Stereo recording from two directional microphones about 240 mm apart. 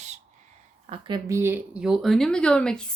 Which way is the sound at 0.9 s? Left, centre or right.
Centre.